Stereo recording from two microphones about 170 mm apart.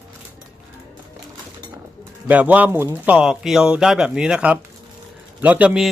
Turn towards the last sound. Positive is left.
turn(degrees=-5)  # may be behind; listen again after turning